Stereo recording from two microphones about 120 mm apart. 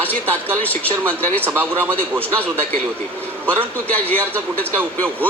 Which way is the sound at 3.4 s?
20° right (ahead or behind).